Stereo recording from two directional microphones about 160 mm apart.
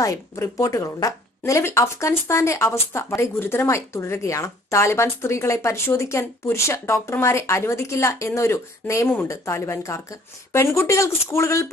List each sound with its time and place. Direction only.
0.0 s speech: 20° left (ahead or behind)